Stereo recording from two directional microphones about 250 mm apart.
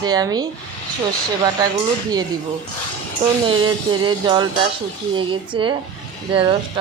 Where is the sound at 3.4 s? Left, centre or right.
Centre.